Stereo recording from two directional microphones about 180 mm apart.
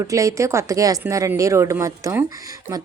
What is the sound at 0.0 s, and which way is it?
A woman's voice, 15° right (ahead or behind).